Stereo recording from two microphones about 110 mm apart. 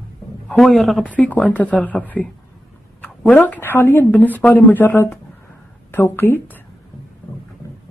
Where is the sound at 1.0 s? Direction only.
15° left (ahead or behind).